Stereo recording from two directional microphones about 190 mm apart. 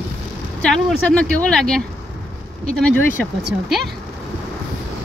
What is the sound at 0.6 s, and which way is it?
A woman's voice, 5° left (ahead or behind).